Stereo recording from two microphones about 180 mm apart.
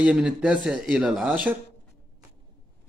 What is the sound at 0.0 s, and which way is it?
Speech, 5° right (ahead or behind).